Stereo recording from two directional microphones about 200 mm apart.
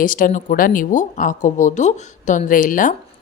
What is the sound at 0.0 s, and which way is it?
Speech, 45° left (ahead or behind).